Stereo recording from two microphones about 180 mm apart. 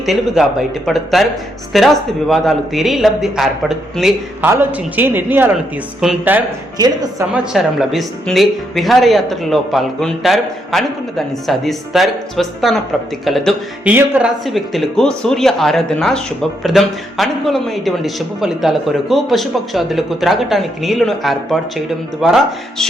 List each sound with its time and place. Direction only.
0.0 s speech: centre (ahead or behind)
4.4 s a man's voice: 10° right (ahead or behind)
6.7 s a woman's voice: 20° right (ahead or behind)
7.5 s speech: centre (ahead or behind)